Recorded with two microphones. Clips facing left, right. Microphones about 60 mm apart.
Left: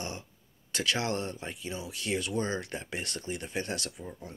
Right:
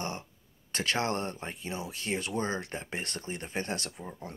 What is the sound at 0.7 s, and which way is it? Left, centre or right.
Speech, right.